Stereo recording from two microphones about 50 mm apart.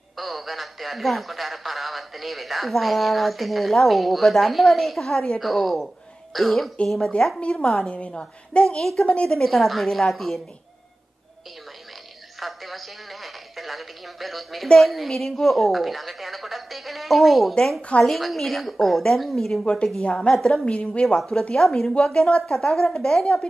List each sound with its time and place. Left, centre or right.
0.2 s a woman's voice: centre
7.3 s a woman's voice: left; by 10.4 s centre
12.4 s a sound: centre
14.8 s a woman's voice: centre
19.6 s a woman's voice: centre
20.6 s speech: left
21.2 s a woman's voice: centre